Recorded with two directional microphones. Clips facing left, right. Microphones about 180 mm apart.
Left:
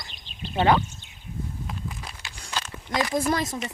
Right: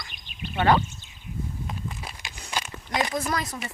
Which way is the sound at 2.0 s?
10° right (ahead or behind).